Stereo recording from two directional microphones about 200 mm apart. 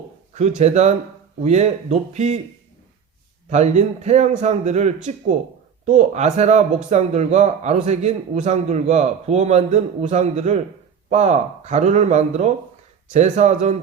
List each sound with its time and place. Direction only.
0.3 s a man's voice: 35° right (ahead or behind)
3.5 s a man's voice: 35° right (ahead or behind)